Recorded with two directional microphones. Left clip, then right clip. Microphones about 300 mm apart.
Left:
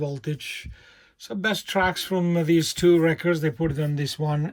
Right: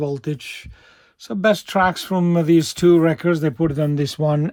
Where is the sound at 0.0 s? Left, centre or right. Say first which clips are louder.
Right 6 dB; centre.